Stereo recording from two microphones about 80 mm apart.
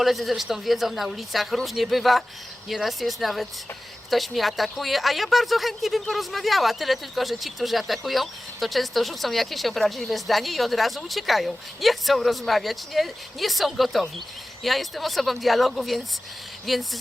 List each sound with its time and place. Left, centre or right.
0.0 s a woman's voice: centre